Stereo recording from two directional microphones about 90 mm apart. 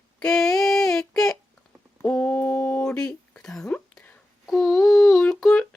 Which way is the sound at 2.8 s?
10° left (ahead or behind).